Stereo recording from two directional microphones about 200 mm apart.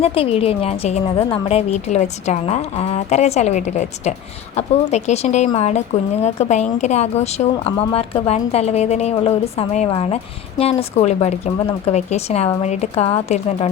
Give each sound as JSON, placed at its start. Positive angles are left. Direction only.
{"t": 0.0, "sound": "a woman's voice", "side_deg": 30}